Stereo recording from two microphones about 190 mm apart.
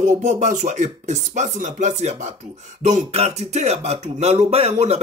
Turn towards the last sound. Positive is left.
turn(degrees=-35)  # may be behind; listen again after turning